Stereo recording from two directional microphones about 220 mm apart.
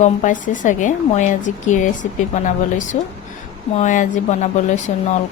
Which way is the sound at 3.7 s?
35° left (ahead or behind).